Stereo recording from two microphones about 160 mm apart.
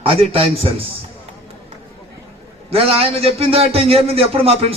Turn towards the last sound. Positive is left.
turn(degrees=-40)  # may be behind; listen again after turning